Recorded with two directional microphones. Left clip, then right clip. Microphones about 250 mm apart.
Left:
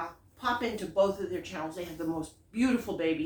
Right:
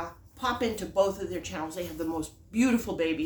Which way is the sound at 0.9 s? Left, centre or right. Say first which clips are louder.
Even; right.